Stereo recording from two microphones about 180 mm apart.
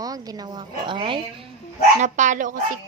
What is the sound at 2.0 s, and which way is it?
Speech, 45° right (ahead or behind).